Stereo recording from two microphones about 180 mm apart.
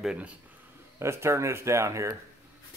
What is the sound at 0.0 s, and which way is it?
A man's voice, 5° right (ahead or behind).